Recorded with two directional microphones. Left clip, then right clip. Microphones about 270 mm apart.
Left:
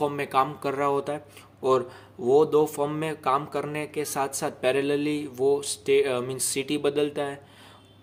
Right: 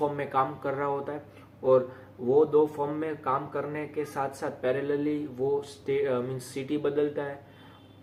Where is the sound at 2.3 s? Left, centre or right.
Left.